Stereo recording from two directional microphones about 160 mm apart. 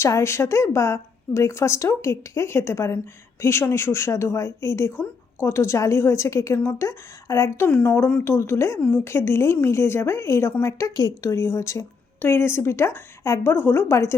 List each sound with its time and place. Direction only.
0.0 s a woman's voice: 20° left (ahead or behind)